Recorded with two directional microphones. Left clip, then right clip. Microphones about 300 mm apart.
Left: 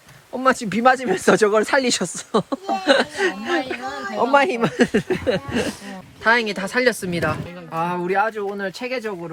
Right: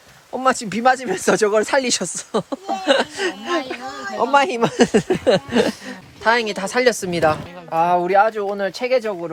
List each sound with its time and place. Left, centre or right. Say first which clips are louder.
0.3 s speech: even; centre
7.7 s speech: right 7 dB; right